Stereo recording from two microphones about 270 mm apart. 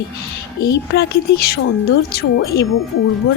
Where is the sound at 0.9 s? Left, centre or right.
Left.